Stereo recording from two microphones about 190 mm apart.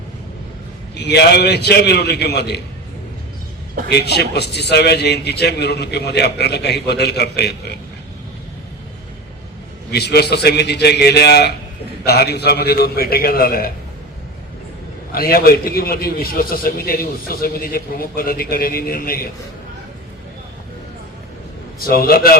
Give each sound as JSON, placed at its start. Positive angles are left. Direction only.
{"t": 0.9, "sound": "a man's voice", "side_deg": 60}
{"t": 3.8, "sound": "a man's voice", "side_deg": 60}
{"t": 9.9, "sound": "a man's voice", "side_deg": 60}
{"t": 15.1, "sound": "a man's voice", "side_deg": 50}
{"t": 21.8, "sound": "a man's voice", "side_deg": 50}